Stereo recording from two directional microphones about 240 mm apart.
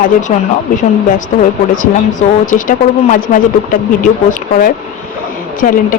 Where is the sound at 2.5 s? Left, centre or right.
Left.